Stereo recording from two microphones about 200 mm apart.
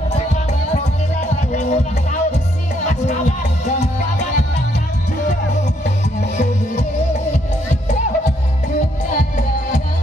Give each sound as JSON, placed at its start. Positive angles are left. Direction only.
{"t": 1.5, "sound": "music", "side_deg": 40}
{"t": 2.9, "sound": "music", "side_deg": 35}
{"t": 6.3, "sound": "music", "side_deg": 35}